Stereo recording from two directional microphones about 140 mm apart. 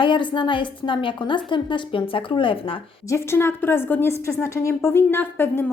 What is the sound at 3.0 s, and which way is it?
A woman's voice, 20° left (ahead or behind).